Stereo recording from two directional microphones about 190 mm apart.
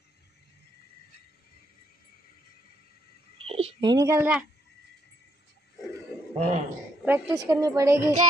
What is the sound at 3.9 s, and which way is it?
Speech, 15° right (ahead or behind).